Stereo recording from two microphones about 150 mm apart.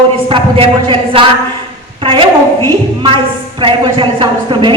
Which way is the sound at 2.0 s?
35° right (ahead or behind).